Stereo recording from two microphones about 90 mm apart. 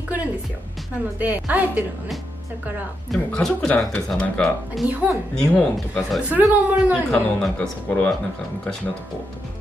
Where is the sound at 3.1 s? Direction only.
5° left (ahead or behind).